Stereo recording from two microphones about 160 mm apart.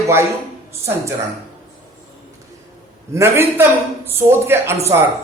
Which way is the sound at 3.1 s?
15° right (ahead or behind).